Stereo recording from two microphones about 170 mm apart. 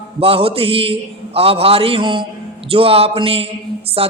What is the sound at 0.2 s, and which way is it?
A man's voice, 35° right (ahead or behind).